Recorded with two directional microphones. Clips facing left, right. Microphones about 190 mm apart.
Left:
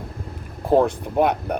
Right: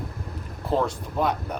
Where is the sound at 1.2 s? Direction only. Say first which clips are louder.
Left 6 dB; 60° left (ahead or behind).